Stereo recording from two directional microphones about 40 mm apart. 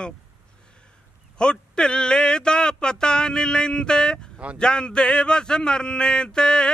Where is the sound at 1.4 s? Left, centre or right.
Left.